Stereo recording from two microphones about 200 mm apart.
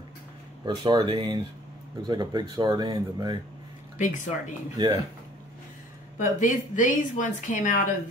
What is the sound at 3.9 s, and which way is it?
Speech, 40° left (ahead or behind).